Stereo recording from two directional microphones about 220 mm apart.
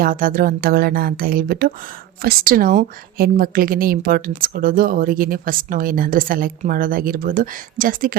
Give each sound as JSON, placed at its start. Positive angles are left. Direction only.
{"t": 0.0, "sound": "a woman's voice", "side_deg": -40}